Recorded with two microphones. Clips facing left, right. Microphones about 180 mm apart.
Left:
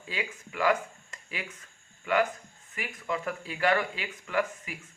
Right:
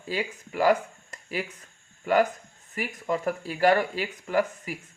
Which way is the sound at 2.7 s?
40° right (ahead or behind).